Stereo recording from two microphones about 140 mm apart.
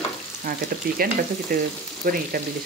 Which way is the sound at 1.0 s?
90° right.